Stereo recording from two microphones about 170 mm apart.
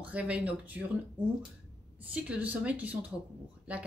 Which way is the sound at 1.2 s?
30° right (ahead or behind).